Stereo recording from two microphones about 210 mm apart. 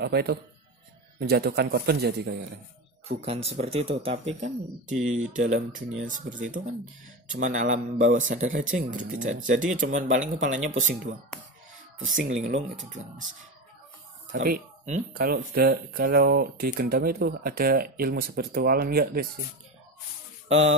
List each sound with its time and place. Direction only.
0.0 s speech: 50° right (ahead or behind)
3.1 s a man's voice: 30° right (ahead or behind)
14.4 s speech: 40° right (ahead or behind)